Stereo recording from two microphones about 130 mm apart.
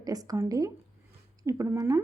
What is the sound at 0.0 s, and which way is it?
A woman's voice, 30° right (ahead or behind).